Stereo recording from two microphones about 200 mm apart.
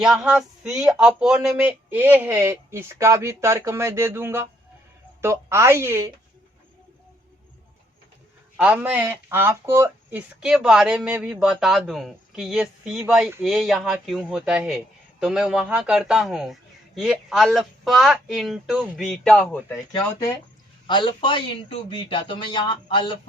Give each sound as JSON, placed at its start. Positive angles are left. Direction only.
{"t": 0.0, "sound": "speech", "side_deg": 0}
{"t": 8.5, "sound": "speech", "side_deg": -5}
{"t": 20.8, "sound": "a man's voice", "side_deg": 25}